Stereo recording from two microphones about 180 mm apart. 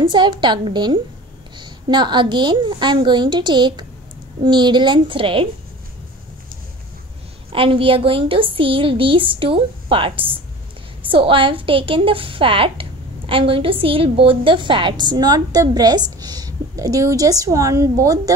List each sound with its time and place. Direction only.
0.0 s a woman's voice: 25° right (ahead or behind)
7.5 s a woman's voice: 30° right (ahead or behind)